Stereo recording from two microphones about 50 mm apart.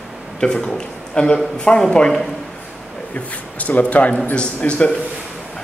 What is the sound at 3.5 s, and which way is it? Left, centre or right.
A man's voice, left.